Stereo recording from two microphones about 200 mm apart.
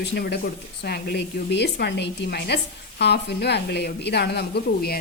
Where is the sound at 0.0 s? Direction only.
55° left (ahead or behind).